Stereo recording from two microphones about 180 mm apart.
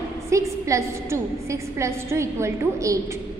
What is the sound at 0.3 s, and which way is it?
A woman's voice, 15° right (ahead or behind).